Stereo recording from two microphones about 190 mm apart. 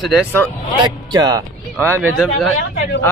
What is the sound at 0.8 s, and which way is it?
Speech, 20° right (ahead or behind).